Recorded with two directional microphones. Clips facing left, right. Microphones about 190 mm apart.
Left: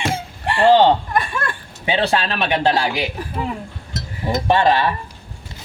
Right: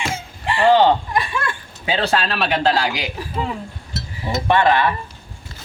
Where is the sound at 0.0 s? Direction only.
55° left (ahead or behind).